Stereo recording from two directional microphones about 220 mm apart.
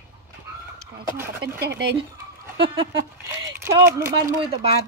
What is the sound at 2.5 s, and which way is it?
Speech, 25° right (ahead or behind).